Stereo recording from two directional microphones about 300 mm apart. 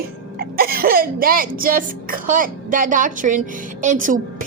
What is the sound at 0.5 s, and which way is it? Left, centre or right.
Speech, right.